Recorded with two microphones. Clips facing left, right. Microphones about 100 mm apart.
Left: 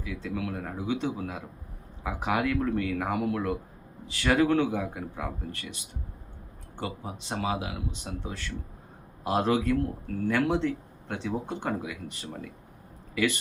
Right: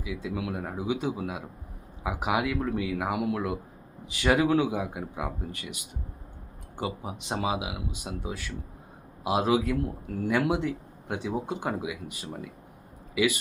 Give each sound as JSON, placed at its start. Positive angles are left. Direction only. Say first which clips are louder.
{"t": 0.0, "sound": "speech", "louder": "right 1 dB", "side_deg": -10}